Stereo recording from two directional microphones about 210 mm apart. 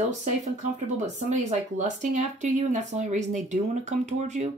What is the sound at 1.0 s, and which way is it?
Speech, 35° right (ahead or behind).